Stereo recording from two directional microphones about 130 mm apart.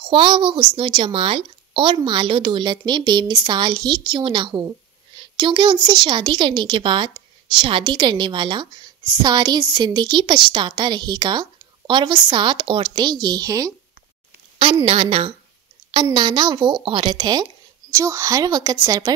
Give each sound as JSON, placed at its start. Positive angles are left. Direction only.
{"t": 0.0, "sound": "a woman's voice", "side_deg": -40}
{"t": 14.9, "sound": "a woman's voice", "side_deg": -45}